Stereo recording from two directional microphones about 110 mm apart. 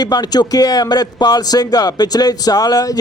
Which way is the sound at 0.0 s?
40° left (ahead or behind).